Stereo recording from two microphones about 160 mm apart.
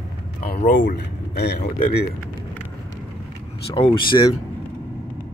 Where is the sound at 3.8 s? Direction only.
35° left (ahead or behind).